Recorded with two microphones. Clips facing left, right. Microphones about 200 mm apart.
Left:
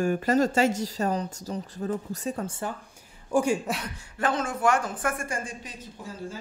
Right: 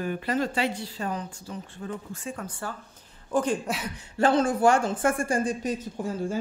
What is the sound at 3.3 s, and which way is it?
Speech, 10° left (ahead or behind).